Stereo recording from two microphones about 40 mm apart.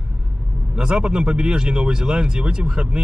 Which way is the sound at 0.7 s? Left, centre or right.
Centre.